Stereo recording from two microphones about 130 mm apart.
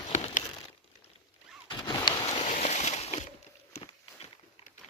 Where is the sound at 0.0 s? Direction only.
60° left (ahead or behind).